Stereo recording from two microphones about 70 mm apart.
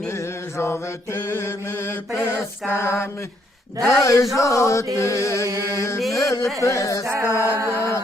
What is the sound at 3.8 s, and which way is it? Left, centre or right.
Speech, left.